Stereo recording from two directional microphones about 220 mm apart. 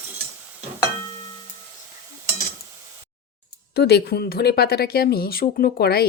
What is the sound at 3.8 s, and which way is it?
Speech, 45° left (ahead or behind).